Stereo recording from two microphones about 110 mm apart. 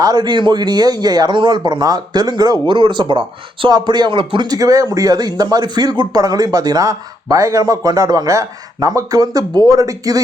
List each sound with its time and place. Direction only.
0.0 s speech: 40° right (ahead or behind)